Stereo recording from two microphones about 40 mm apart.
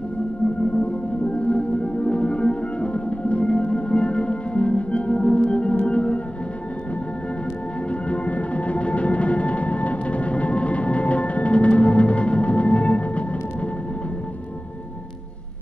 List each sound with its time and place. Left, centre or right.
1.2 s music: left
7.9 s music: left